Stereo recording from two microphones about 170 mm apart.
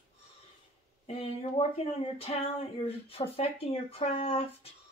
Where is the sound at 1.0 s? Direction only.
35° left (ahead or behind).